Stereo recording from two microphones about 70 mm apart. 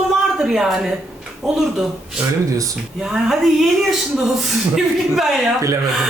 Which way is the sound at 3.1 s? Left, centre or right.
Centre.